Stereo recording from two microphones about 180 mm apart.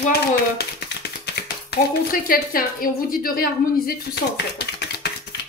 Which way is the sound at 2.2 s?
55° left (ahead or behind).